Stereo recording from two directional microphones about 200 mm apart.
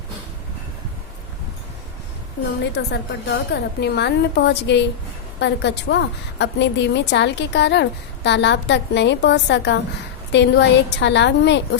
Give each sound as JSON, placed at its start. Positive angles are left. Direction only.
{"t": 2.7, "sound": "a woman's voice", "side_deg": 55}